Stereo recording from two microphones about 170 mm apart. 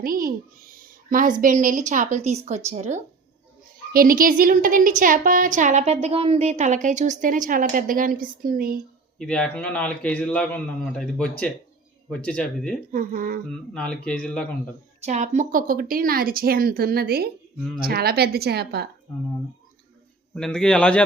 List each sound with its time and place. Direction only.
0.0 s a woman's voice: 55° right (ahead or behind); by 3.0 s 40° right (ahead or behind)
3.9 s a woman's voice: 55° right (ahead or behind)
9.1 s a man's voice: 5° left (ahead or behind)
12.9 s speech: 55° right (ahead or behind)
13.5 s speech: 5° left (ahead or behind)
15.0 s a woman's voice: 45° right (ahead or behind); by 18.9 s 70° right (ahead or behind)
20.3 s a man's voice: 5° left (ahead or behind)